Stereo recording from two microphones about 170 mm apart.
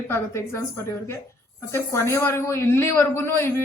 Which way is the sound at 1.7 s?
15° left (ahead or behind).